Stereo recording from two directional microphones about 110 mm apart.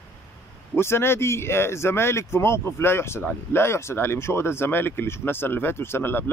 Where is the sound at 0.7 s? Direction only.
20° left (ahead or behind).